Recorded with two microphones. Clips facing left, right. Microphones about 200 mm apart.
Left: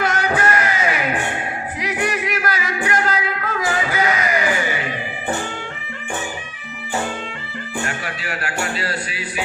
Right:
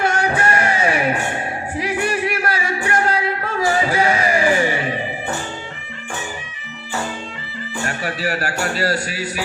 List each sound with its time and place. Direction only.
0.0 s music: 30° right (ahead or behind)
7.9 s music: 35° right (ahead or behind)